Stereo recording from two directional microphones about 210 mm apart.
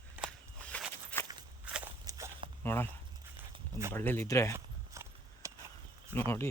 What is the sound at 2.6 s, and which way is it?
Speech, 10° left (ahead or behind).